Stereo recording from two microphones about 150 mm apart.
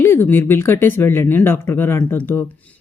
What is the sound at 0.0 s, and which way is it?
Speech, 15° left (ahead or behind).